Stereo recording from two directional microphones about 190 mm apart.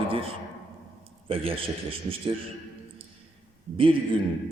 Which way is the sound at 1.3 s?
30° right (ahead or behind).